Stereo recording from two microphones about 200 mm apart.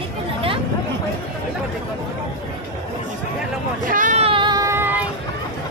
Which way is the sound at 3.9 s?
40° right (ahead or behind).